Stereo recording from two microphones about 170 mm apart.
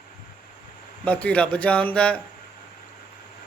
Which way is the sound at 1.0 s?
10° left (ahead or behind).